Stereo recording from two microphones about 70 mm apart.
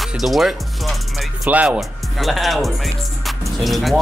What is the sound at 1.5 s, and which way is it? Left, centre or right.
Speech, centre.